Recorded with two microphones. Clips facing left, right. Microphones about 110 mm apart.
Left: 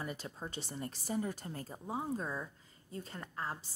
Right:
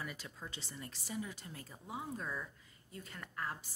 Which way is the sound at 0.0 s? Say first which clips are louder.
Left 4 dB; 35° left (ahead or behind).